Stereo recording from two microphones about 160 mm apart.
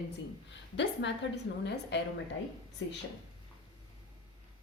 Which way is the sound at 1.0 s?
90° left.